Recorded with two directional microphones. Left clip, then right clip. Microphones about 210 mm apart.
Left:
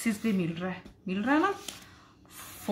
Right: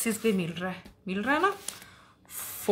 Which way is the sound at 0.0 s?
45° right (ahead or behind).